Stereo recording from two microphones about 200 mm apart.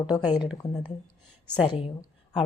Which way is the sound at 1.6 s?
25° left (ahead or behind).